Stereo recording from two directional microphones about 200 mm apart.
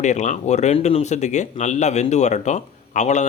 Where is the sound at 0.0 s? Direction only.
35° left (ahead or behind).